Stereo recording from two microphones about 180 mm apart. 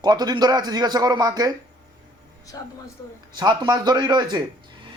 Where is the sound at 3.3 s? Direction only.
25° right (ahead or behind).